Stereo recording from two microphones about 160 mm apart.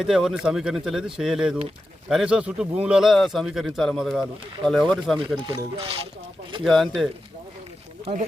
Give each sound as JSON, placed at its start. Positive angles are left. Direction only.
{"t": 0.0, "sound": "speech", "side_deg": 0}
{"t": 5.5, "sound": "speech", "side_deg": -35}
{"t": 6.7, "sound": "speech", "side_deg": 0}